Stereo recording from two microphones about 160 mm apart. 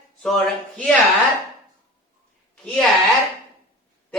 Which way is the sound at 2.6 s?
5° left (ahead or behind).